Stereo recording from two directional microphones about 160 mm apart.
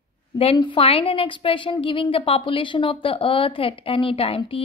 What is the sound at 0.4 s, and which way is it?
A woman's voice, 35° left (ahead or behind).